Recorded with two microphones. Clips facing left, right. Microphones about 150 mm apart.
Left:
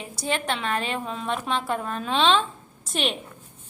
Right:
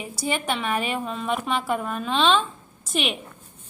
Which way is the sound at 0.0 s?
10° right (ahead or behind).